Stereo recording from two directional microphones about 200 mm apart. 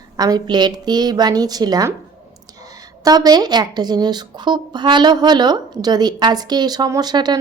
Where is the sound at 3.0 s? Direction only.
20° right (ahead or behind).